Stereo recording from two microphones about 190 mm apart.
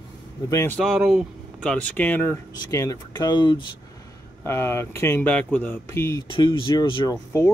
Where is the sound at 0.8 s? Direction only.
Centre (ahead or behind); by 3.7 s 25° left (ahead or behind).